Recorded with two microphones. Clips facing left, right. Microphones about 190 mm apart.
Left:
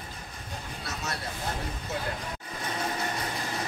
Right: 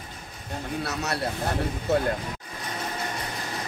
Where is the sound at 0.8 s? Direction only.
70° right (ahead or behind).